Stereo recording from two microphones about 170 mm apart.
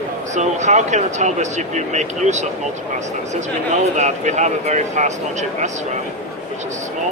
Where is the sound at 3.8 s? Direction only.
45° right (ahead or behind).